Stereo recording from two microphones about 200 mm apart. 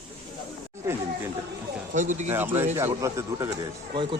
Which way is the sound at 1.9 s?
40° right (ahead or behind).